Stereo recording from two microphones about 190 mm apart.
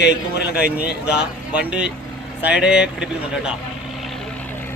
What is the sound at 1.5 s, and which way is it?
Speech, 5° right (ahead or behind).